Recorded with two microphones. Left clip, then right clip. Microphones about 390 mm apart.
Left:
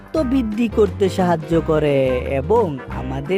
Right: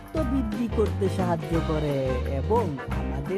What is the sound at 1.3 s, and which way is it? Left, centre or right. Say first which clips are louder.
Speech: left 9 dB; centre.